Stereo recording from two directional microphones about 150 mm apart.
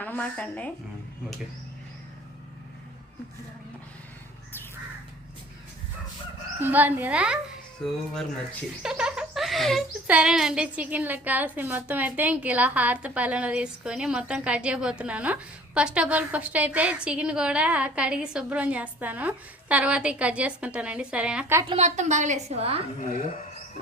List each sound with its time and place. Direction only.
0.0 s a woman's voice: 10° left (ahead or behind)
6.6 s a woman's voice: 10° right (ahead or behind)
7.8 s speech: 5° left (ahead or behind)
8.8 s giggle: 5° right (ahead or behind)
10.1 s a woman's voice: 5° right (ahead or behind)
21.8 s a woman's voice: 50° right (ahead or behind)